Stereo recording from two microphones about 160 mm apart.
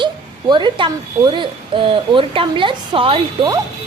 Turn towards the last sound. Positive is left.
turn(degrees=-35)  # may be behind; listen again after turning